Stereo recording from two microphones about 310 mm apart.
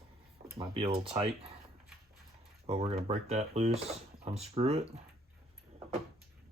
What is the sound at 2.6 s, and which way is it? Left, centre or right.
Speech, centre.